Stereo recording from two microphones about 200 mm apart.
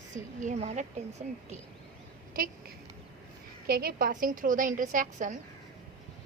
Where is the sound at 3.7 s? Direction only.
50° right (ahead or behind).